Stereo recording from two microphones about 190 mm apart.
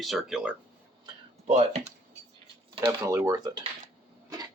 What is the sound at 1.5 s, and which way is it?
Speech, 35° right (ahead or behind).